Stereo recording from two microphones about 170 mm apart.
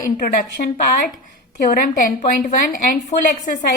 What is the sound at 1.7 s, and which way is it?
A woman's voice, 55° left (ahead or behind).